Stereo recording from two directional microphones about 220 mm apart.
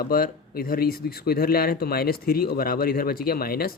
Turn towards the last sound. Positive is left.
turn(degrees=45)  # may be behind; listen again after turning